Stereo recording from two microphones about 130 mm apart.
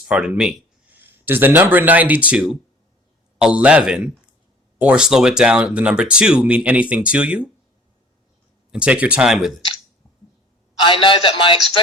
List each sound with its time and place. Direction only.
0.0 s speech: 5° right (ahead or behind)
8.7 s speech: 10° right (ahead or behind)
10.8 s a man's voice: 40° left (ahead or behind)